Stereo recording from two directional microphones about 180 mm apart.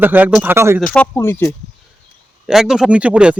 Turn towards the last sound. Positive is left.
turn(degrees=-5)  # may be behind; listen again after turning